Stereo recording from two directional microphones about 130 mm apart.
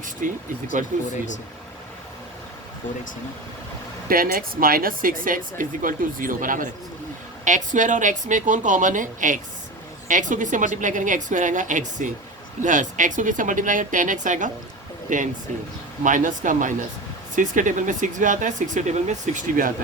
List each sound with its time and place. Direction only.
0.2 s speech: 90° right
0.8 s a woman's voice: 80° right
4.1 s speech: 90° right
7.4 s a woman's voice: 75° right (ahead or behind)